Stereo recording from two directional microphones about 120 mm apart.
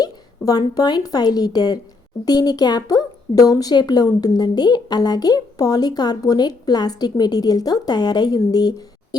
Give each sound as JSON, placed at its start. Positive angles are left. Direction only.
{"t": 0.0, "sound": "a woman's voice", "side_deg": 30}